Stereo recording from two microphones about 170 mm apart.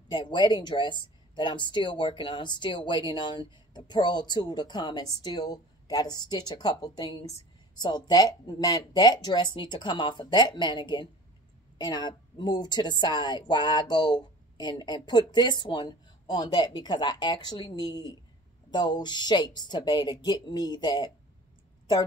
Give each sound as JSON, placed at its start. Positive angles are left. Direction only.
{"t": 0.1, "sound": "a woman's voice", "side_deg": 25}